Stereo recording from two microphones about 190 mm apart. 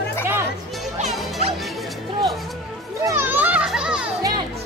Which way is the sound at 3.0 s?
10° right (ahead or behind).